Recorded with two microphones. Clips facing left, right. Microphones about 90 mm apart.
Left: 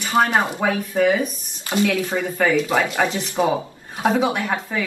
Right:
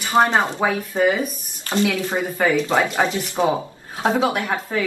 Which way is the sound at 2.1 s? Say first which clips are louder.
Even; 15° right (ahead or behind).